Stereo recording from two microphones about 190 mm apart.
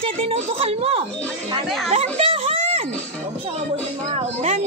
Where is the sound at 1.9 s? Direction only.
35° right (ahead or behind).